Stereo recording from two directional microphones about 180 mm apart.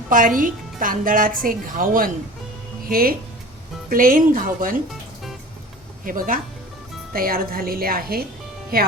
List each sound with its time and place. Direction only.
0.1 s a woman's voice: 50° right (ahead or behind)
6.1 s a woman's voice: 50° right (ahead or behind)